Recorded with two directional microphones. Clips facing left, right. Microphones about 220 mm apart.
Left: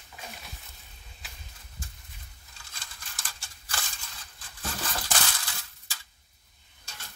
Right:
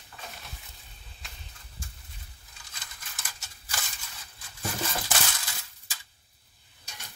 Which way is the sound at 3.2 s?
5° right (ahead or behind).